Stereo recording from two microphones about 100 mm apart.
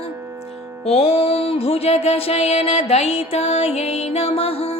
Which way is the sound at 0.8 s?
90° left.